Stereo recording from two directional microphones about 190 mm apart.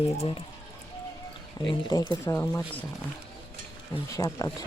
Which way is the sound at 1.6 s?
20° left (ahead or behind).